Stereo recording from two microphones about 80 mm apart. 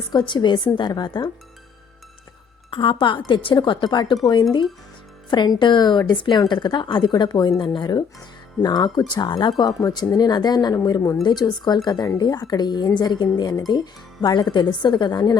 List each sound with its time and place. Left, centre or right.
0.1 s a woman's voice: left
2.6 s speech: left
5.5 s a woman's voice: left
8.6 s speech: left
11.2 s speech: left